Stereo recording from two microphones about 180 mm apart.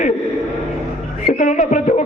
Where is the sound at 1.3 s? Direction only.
45° left (ahead or behind).